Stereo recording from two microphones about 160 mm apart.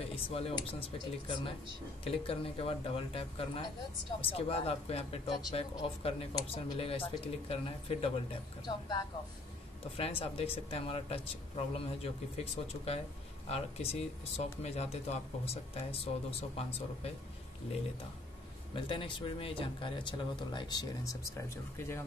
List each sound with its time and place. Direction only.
0.0 s speech: 35° left (ahead or behind)
13.5 s speech: 40° left (ahead or behind)
18.8 s speech: 30° left (ahead or behind); by 22.0 s 15° left (ahead or behind)